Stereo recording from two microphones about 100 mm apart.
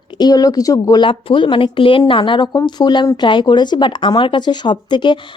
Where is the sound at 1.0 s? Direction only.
55° left (ahead or behind).